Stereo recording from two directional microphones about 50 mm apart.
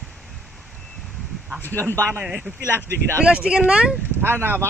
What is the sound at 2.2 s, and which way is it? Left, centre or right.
Speech, centre.